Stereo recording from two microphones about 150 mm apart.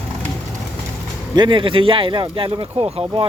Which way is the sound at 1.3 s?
30° right (ahead or behind).